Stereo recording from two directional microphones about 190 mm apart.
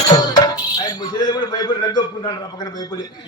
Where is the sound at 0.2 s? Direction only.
20° left (ahead or behind).